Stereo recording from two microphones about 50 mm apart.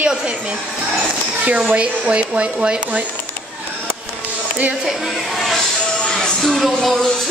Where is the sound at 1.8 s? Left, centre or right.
Right.